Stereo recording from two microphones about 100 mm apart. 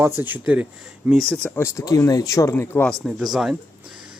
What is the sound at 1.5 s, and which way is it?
Speech, 30° left (ahead or behind).